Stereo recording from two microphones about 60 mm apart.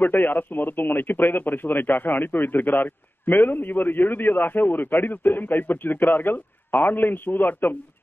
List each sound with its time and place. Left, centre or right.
0.0 s speech: left